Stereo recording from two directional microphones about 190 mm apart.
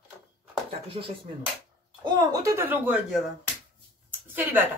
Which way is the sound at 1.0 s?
30° right (ahead or behind).